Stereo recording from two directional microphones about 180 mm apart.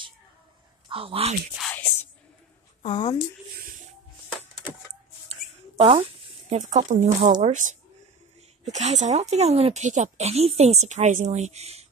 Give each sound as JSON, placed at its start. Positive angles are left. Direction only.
{"t": 0.8, "sound": "speech", "side_deg": -30}
{"t": 1.6, "sound": "music", "side_deg": 10}
{"t": 2.8, "sound": "speech", "side_deg": 25}
{"t": 5.3, "sound": "a sound", "side_deg": -35}
{"t": 6.5, "sound": "speech", "side_deg": -40}